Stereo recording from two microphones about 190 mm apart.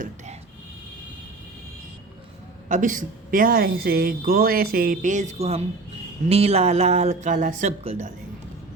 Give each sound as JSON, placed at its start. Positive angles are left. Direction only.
{"t": 2.6, "sound": "a woman's voice", "side_deg": -40}